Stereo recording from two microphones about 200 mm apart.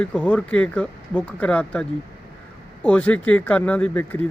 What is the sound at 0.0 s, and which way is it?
Speech, 5° left (ahead or behind).